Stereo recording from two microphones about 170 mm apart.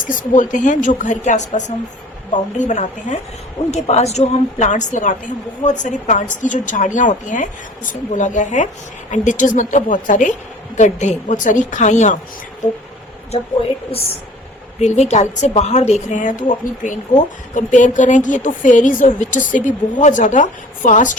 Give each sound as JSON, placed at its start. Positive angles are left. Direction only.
{"t": 0.0, "sound": "a woman's voice", "side_deg": 50}
{"t": 13.3, "sound": "a woman's voice", "side_deg": 35}